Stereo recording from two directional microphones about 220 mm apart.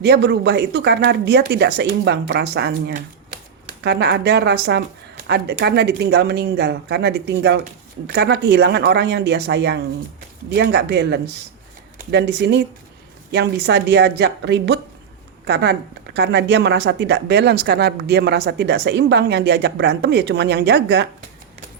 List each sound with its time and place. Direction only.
0.0 s speech: 50° right (ahead or behind)